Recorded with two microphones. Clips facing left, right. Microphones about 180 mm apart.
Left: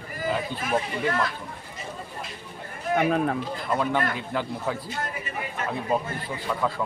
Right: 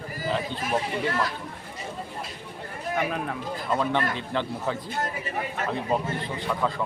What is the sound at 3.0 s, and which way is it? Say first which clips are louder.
Speech: left 6 dB; 45° left (ahead or behind).